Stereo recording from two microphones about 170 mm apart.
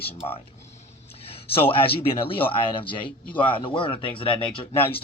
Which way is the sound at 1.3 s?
35° left (ahead or behind).